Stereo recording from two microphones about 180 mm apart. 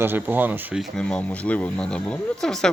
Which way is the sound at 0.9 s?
5° left (ahead or behind).